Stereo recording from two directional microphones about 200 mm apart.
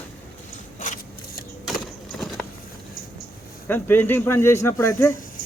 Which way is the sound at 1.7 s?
Centre (ahead or behind).